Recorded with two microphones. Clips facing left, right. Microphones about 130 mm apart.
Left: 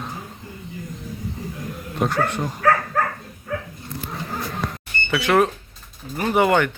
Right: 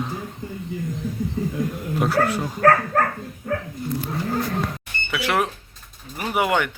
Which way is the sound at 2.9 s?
50° right (ahead or behind).